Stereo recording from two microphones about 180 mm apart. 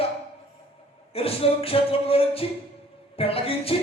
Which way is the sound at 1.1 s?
30° left (ahead or behind).